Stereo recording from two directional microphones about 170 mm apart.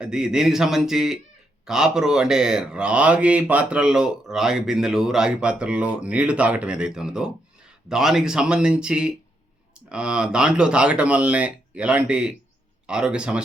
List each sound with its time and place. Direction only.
0.0 s speech: 5° right (ahead or behind)